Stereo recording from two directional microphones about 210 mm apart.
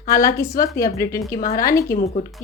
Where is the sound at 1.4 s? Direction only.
45° left (ahead or behind).